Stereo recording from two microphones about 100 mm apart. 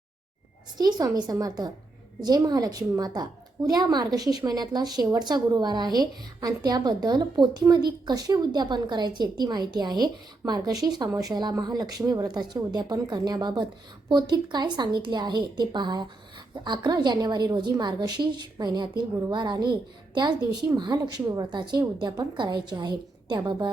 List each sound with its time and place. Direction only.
0.8 s a woman's voice: 40° right (ahead or behind)